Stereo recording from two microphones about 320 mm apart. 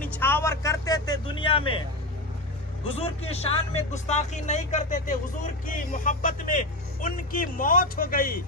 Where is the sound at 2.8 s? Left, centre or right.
Centre.